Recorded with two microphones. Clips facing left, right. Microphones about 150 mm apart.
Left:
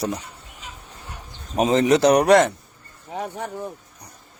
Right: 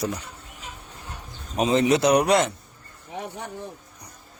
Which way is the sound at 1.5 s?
45° left (ahead or behind).